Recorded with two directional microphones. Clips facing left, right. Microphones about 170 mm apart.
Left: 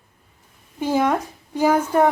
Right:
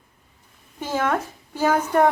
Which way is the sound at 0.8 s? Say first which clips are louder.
Left 4 dB; 10° left (ahead or behind).